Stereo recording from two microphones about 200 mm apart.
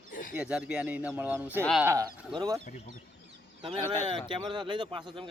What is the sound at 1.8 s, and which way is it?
Speech, 15° right (ahead or behind).